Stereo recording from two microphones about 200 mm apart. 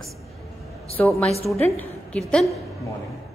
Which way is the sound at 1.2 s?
30° left (ahead or behind).